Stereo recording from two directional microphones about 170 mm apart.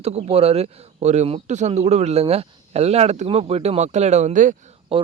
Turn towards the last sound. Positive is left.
turn(degrees=-35)  # may be behind; listen again after turning